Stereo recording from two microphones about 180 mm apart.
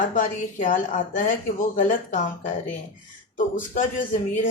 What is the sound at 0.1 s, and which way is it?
Speech, 45° left (ahead or behind).